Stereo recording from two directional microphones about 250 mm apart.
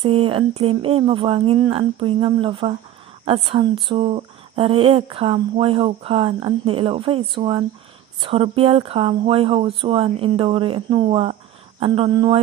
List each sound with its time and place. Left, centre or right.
0.0 s speech: right